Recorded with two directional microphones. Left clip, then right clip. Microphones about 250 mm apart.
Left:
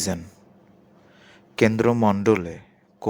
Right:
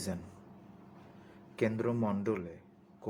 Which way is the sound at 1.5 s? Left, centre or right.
Left.